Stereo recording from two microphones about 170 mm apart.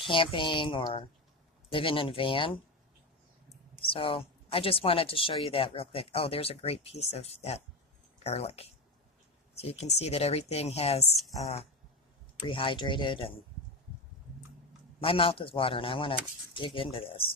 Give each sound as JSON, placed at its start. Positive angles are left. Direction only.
{"t": 0.0, "sound": "speech", "side_deg": 30}
{"t": 3.8, "sound": "speech", "side_deg": 30}
{"t": 15.0, "sound": "speech", "side_deg": 30}